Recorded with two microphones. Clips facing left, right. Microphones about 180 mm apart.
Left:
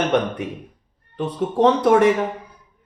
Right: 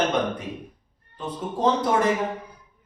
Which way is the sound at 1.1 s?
80° left.